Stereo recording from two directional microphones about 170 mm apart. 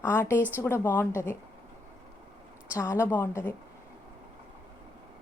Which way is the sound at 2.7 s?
15° left (ahead or behind).